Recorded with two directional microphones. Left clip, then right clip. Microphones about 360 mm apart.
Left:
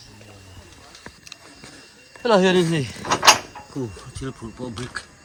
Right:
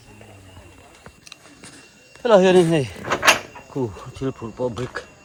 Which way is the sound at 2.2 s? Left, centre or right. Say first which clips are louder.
Right 3 dB; centre.